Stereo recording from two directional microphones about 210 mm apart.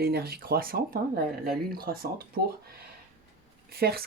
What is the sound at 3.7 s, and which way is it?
Speech, 50° right (ahead or behind).